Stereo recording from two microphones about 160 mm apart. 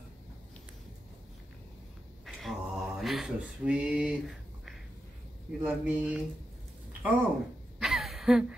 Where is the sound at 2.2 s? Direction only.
Centre (ahead or behind).